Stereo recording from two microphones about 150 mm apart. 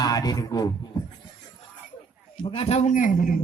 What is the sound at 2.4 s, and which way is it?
Speech, 35° left (ahead or behind).